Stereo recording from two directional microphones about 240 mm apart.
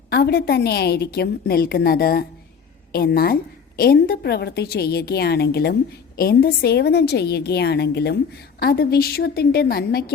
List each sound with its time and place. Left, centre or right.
0.1 s a woman's voice: left